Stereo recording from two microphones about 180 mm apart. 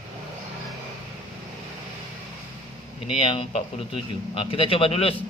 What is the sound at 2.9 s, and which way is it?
A man's voice, 30° left (ahead or behind).